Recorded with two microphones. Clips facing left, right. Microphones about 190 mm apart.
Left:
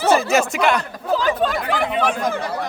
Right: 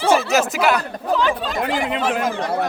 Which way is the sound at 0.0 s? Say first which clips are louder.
Even; 5° right (ahead or behind).